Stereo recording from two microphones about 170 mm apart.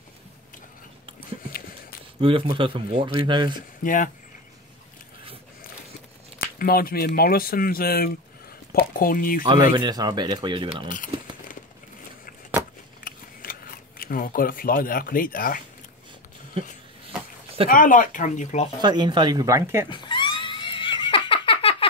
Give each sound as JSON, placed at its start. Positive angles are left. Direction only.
{"t": 2.1, "sound": "speech", "side_deg": -30}
{"t": 3.8, "sound": "speech", "side_deg": 50}
{"t": 6.3, "sound": "speech", "side_deg": 60}
{"t": 9.8, "sound": "speech", "side_deg": -25}
{"t": 13.0, "sound": "a sound", "side_deg": 60}
{"t": 17.6, "sound": "speech", "side_deg": 50}
{"t": 18.8, "sound": "speech", "side_deg": -25}
{"t": 19.9, "sound": "a sound", "side_deg": 30}